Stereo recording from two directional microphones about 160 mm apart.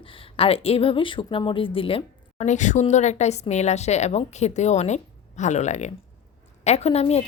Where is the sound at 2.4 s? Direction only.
50° left (ahead or behind).